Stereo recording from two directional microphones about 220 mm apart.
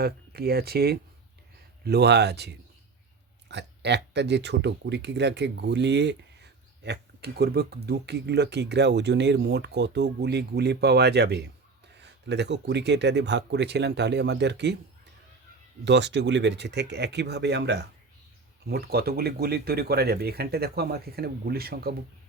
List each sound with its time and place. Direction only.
0.0 s speech: 45° right (ahead or behind)
15.8 s speech: 50° right (ahead or behind)